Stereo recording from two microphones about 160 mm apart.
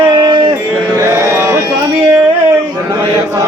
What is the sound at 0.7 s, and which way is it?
Mantra, 15° right (ahead or behind).